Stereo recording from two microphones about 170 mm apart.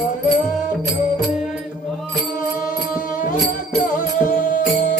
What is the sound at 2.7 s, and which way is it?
Music, 50° left (ahead or behind).